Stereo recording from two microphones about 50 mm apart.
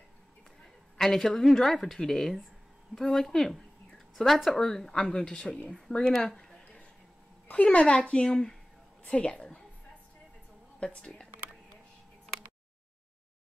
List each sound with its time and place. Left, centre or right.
0.9 s speech: centre
7.4 s a woman's voice: left
10.8 s a woman's voice: centre